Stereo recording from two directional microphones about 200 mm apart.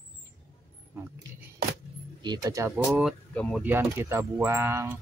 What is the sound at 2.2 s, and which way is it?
Speech, 20° right (ahead or behind).